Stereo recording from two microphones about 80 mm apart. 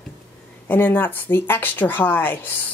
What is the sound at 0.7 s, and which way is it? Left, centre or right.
Speech, left.